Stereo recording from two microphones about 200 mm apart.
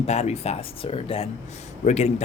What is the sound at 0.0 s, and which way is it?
Speech, 30° left (ahead or behind).